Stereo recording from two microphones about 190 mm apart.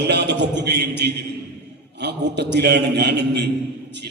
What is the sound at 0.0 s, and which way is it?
A man's voice, 60° right (ahead or behind).